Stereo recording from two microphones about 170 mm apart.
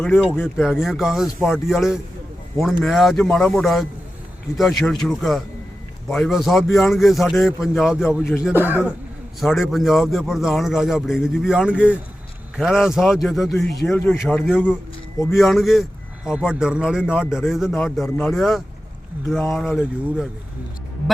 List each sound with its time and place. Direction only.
0.0 s a man's voice: 5° left (ahead or behind)
8.2 s speech: 15° left (ahead or behind)
9.4 s a man's voice: centre (ahead or behind)